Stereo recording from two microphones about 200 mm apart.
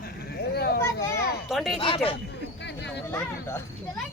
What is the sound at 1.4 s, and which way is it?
Speech, centre (ahead or behind).